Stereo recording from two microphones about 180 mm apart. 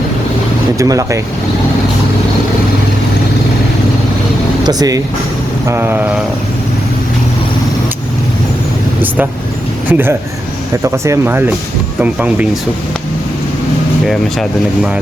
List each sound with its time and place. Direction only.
0.8 s speech: 20° right (ahead or behind)
4.6 s speech: 20° right (ahead or behind)
9.9 s speech: 10° right (ahead or behind)